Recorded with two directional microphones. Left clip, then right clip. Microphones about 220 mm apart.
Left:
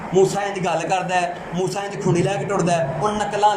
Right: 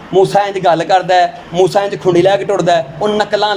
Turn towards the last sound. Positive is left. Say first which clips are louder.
# right 7 dB
turn(degrees=-35)  # may be behind; listen again after turning